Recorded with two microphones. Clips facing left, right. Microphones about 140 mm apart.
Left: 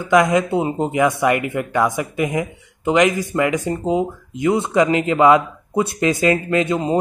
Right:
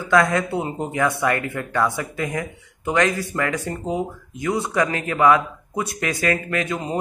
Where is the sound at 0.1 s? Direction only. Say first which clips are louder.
Left 4 dB; 15° left (ahead or behind).